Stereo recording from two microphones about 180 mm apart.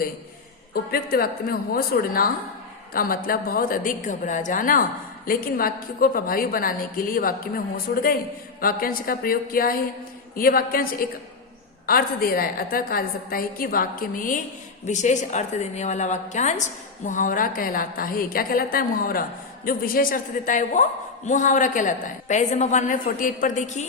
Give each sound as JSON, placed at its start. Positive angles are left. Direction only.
{"t": 0.7, "sound": "a woman's voice", "side_deg": 55}
{"t": 7.9, "sound": "a woman's voice", "side_deg": 65}
{"t": 8.6, "sound": "a woman's voice", "side_deg": 55}